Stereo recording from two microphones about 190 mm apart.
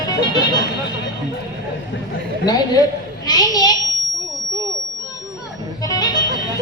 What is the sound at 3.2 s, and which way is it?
Speech, 20° left (ahead or behind).